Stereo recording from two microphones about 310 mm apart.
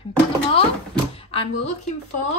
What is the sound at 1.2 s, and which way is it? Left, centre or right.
Speech, centre.